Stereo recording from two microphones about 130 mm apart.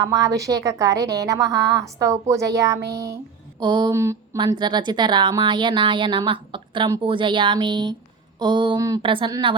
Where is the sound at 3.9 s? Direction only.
20° right (ahead or behind).